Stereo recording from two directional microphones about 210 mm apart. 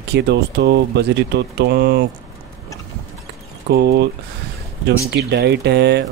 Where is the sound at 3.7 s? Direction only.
50° right (ahead or behind).